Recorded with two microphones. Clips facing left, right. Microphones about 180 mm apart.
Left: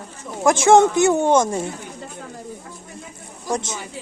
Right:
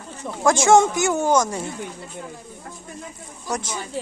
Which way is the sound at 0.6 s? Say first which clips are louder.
Left 4 dB; 25° left (ahead or behind).